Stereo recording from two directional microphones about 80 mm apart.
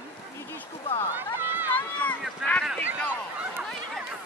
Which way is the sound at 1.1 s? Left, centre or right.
Right.